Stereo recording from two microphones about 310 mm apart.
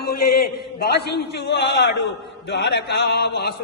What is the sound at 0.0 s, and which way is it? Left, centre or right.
A man's voice, left.